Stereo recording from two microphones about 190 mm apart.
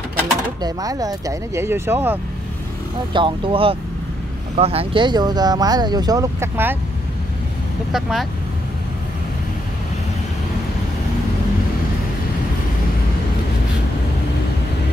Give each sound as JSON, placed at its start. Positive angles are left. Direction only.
{"t": 0.6, "sound": "speech", "side_deg": -20}
{"t": 3.1, "sound": "speech", "side_deg": -25}
{"t": 7.9, "sound": "speech", "side_deg": 0}